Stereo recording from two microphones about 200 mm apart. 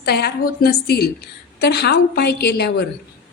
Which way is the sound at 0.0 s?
55° left (ahead or behind).